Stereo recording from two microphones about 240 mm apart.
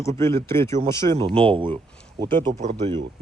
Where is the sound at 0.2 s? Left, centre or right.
Centre.